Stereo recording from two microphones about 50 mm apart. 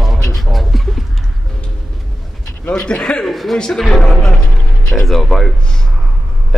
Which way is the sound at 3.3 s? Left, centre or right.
Centre.